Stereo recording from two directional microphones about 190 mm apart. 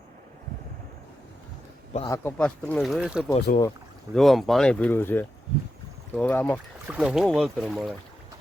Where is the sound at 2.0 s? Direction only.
15° left (ahead or behind).